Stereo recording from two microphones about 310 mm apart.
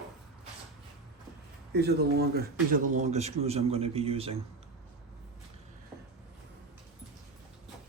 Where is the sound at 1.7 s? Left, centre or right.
Right.